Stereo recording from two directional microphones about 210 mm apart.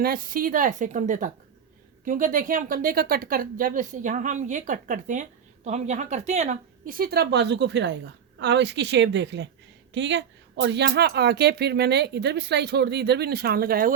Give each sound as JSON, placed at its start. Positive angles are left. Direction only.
{"t": 0.0, "sound": "a woman's voice", "side_deg": -45}